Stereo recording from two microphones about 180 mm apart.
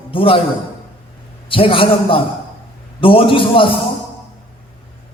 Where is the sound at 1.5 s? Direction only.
30° left (ahead or behind).